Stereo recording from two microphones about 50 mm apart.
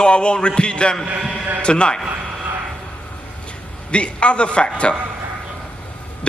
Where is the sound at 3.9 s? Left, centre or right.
Left.